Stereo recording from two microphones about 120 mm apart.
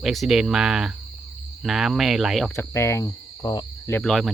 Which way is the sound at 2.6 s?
20° left (ahead or behind).